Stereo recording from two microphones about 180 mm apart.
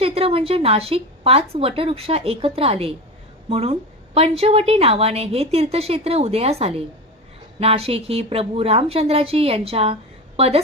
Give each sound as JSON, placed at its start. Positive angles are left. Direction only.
{"t": 0.0, "sound": "a woman's voice", "side_deg": -30}